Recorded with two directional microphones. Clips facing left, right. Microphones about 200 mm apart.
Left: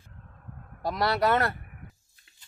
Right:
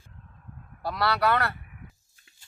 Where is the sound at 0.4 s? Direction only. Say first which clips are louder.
Left 2 dB; 50° left (ahead or behind).